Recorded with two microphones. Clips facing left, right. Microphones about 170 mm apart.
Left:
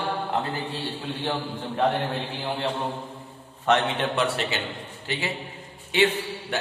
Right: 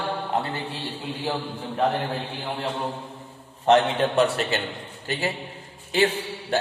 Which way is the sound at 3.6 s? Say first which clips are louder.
Right 4 dB; 35° right (ahead or behind).